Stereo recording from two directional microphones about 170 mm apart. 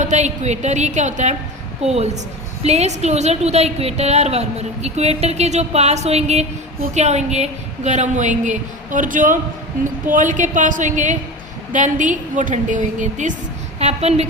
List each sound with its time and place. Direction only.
0.0 s a woman's voice: 45° right (ahead or behind)